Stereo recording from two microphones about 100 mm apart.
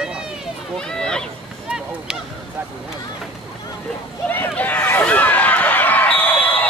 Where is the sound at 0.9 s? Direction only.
5° left (ahead or behind).